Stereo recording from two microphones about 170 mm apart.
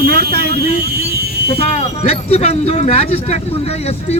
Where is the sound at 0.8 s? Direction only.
70° right (ahead or behind).